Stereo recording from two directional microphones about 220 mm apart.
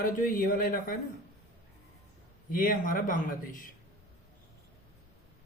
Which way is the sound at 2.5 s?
40° left (ahead or behind).